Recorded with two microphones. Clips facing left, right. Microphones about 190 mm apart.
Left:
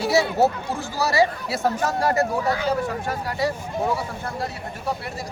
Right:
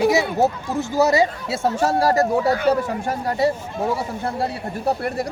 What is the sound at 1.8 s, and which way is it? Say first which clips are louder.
Speech: right 7 dB; 35° right (ahead or behind).